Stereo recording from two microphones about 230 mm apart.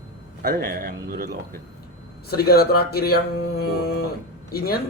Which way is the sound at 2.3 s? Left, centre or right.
Left.